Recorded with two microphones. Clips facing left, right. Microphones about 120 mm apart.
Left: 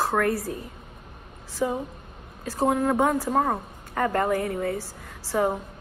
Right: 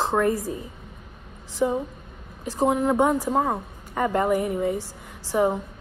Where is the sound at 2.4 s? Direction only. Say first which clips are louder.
Right 1 dB; 15° right (ahead or behind).